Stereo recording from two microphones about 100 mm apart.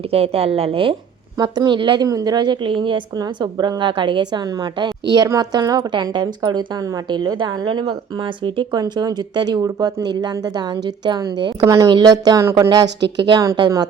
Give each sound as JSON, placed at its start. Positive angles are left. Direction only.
{"t": 0.1, "sound": "a woman's voice", "side_deg": -90}
{"t": 1.4, "sound": "a woman's voice", "side_deg": -45}
{"t": 2.0, "sound": "a woman's voice", "side_deg": -40}
{"t": 3.2, "sound": "a woman's voice", "side_deg": -45}
{"t": 8.8, "sound": "a woman's voice", "side_deg": -40}
{"t": 11.6, "sound": "speech", "side_deg": -30}
{"t": 11.9, "sound": "a woman's voice", "side_deg": -45}